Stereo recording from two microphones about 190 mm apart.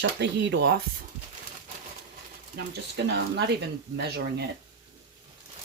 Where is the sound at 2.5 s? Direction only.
65° right (ahead or behind).